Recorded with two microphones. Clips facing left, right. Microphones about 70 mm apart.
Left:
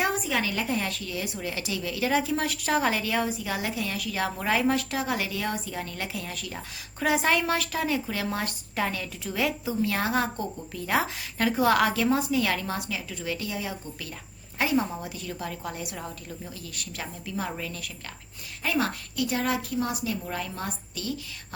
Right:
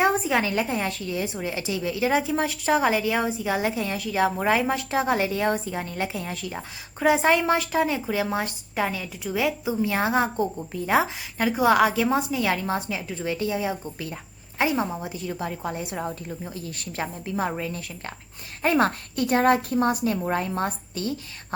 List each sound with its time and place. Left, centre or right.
0.0 s a sound: right
0.6 s a woman's voice: right
18.6 s a woman's voice: right